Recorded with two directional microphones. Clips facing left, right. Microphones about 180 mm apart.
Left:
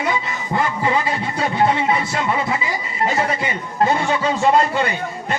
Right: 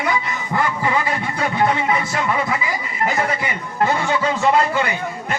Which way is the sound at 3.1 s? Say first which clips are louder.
Left 1 dB; 25° left (ahead or behind).